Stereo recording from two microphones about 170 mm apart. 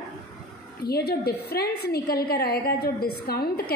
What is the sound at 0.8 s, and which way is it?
A woman's voice, 65° left (ahead or behind).